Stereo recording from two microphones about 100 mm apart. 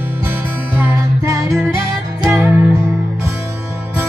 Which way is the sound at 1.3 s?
35° right (ahead or behind).